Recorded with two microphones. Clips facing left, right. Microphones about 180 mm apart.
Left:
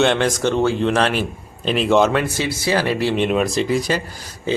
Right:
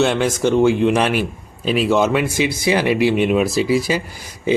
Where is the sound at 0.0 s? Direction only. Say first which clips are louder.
Even; 5° right (ahead or behind).